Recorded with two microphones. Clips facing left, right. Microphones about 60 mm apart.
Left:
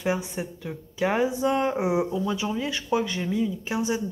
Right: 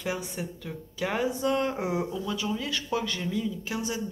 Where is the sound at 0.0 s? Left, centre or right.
Left.